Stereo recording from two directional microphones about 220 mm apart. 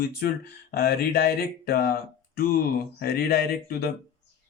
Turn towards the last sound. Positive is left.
turn(degrees=45)  # may be behind; listen again after turning